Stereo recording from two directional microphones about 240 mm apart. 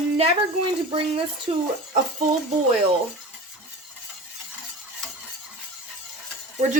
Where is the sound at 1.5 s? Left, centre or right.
Right.